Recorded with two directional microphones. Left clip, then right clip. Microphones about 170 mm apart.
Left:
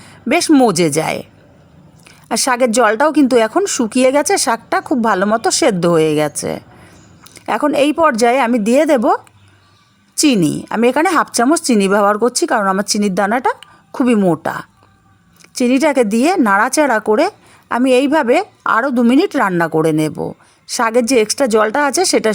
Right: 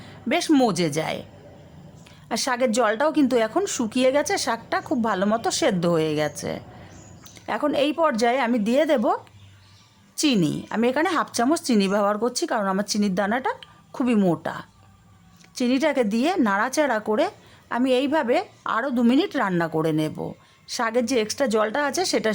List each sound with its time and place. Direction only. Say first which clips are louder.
0.0 s a woman's voice: left 9 dB; 35° left (ahead or behind)